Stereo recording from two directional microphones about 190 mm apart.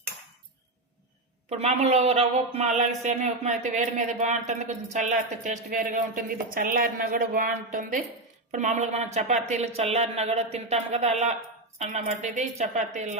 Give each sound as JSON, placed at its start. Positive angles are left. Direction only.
{"t": 1.5, "sound": "a man's voice", "side_deg": -35}